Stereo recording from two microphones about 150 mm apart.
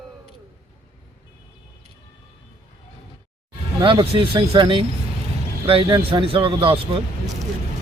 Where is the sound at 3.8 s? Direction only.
35° right (ahead or behind).